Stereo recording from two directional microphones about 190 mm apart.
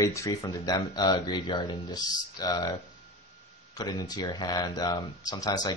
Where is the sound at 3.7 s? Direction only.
20° left (ahead or behind).